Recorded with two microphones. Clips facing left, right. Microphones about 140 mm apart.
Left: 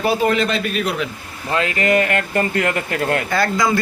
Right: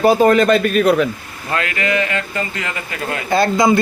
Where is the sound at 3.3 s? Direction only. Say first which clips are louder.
Right 9 dB; 25° right (ahead or behind).